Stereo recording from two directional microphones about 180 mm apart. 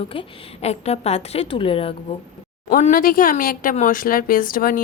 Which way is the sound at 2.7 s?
50° left (ahead or behind).